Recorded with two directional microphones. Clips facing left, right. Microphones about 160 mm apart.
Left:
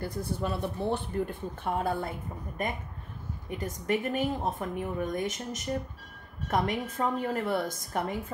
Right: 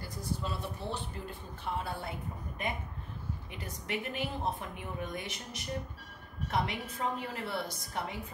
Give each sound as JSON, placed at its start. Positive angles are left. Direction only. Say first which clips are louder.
{"t": 0.0, "sound": "a woman's voice", "louder": "left 6 dB", "side_deg": 55}